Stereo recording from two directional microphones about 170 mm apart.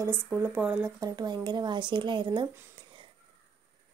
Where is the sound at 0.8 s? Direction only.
20° right (ahead or behind).